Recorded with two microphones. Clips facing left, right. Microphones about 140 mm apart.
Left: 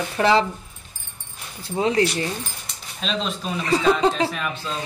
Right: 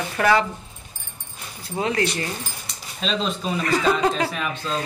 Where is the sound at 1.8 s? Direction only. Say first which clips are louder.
Left 3 dB; 30° left (ahead or behind).